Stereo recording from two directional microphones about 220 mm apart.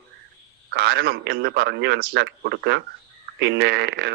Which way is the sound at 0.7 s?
50° right (ahead or behind).